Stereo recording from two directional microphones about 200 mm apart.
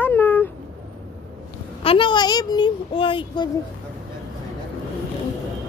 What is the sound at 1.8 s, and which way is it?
Speech, 25° left (ahead or behind).